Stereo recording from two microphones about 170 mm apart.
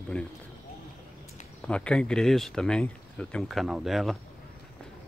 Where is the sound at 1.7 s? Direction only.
5° left (ahead or behind).